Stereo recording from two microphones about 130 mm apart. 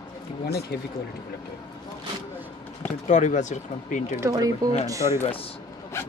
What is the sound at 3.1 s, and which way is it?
Speech, 65° left (ahead or behind).